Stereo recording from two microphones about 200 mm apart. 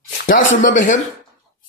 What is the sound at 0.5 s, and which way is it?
Speech, 40° left (ahead or behind).